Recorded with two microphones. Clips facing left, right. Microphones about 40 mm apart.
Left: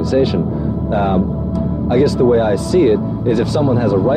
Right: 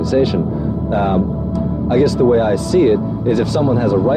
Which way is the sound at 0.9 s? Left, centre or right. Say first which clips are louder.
Even; centre.